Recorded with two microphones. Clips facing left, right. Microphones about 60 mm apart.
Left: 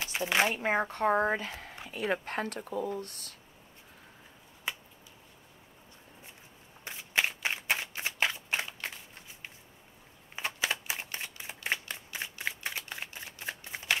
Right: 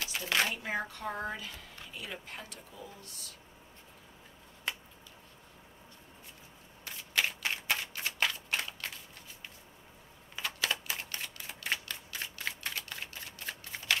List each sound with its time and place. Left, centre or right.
0.0 s speech: left
0.6 s speech: left
1.9 s speech: left
4.7 s finger snapping: centre
6.8 s shuffling cards: left